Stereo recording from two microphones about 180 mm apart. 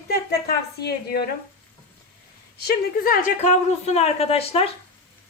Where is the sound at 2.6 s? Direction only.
55° left (ahead or behind); by 4.6 s 35° left (ahead or behind).